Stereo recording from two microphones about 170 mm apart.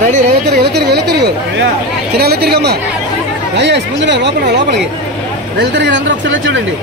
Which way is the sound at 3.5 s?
90° right.